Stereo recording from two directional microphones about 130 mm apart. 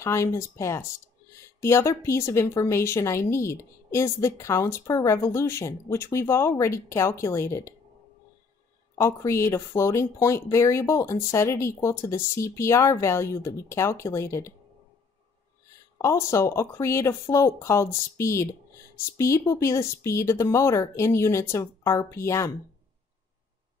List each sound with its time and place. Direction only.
0.0 s speech: 20° left (ahead or behind)
8.9 s speech: 20° left (ahead or behind)
16.0 s speech: 20° left (ahead or behind)